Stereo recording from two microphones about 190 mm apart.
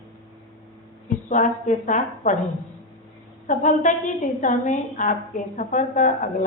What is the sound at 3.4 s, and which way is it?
A woman's voice, 40° left (ahead or behind).